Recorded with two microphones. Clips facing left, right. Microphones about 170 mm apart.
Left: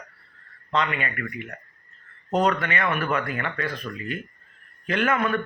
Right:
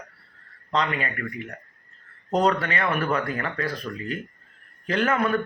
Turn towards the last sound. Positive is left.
turn(degrees=-35)  # may be behind; listen again after turning